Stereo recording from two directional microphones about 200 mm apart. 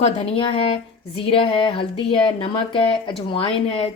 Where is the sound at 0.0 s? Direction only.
30° left (ahead or behind).